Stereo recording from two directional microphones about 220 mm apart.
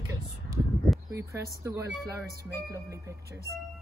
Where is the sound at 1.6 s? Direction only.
15° right (ahead or behind).